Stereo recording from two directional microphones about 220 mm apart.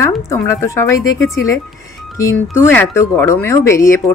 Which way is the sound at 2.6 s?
10° left (ahead or behind).